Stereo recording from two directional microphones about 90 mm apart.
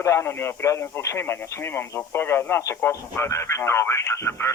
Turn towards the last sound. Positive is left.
turn(degrees=30)  # may be behind; listen again after turning